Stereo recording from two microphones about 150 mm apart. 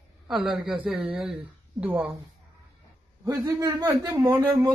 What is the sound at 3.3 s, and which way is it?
Speech, 20° right (ahead or behind).